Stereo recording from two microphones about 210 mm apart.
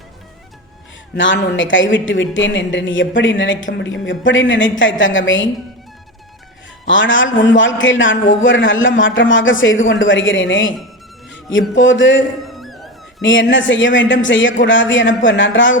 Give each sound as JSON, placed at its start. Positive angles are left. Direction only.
{"t": 1.1, "sound": "a man's voice", "side_deg": 60}
{"t": 6.8, "sound": "a man's voice", "side_deg": 65}
{"t": 12.4, "sound": "a sound", "side_deg": 0}
{"t": 13.2, "sound": "a man's voice", "side_deg": 60}